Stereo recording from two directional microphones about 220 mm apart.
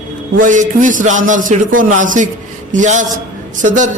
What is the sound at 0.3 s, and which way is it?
Speech, 35° right (ahead or behind).